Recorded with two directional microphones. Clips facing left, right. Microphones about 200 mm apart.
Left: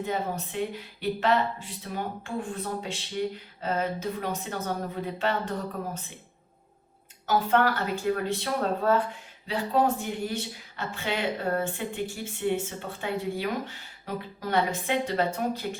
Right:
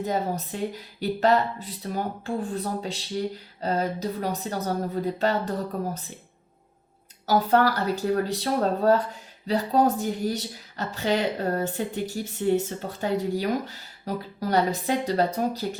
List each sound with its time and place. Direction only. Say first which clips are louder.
0.0 s a woman's voice: right 3 dB; 40° right (ahead or behind)
7.3 s a woman's voice: right 3 dB; 35° right (ahead or behind)